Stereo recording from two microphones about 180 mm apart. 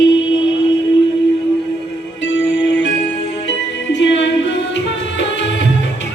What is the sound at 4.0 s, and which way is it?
Music, 90° left.